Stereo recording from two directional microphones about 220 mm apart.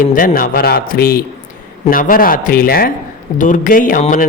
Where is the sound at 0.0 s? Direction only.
40° left (ahead or behind).